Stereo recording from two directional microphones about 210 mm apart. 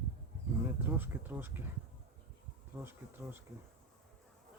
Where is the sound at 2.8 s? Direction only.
10° right (ahead or behind).